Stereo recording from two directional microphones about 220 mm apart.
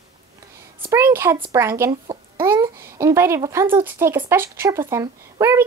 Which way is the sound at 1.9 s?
25° right (ahead or behind).